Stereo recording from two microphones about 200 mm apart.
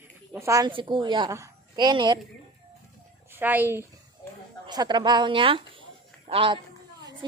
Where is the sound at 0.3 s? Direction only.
15° right (ahead or behind).